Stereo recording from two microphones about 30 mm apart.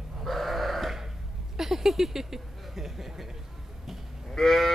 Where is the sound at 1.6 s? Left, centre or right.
Centre.